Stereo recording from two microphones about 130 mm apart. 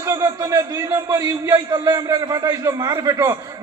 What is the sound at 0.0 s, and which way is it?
A man's voice, 25° right (ahead or behind).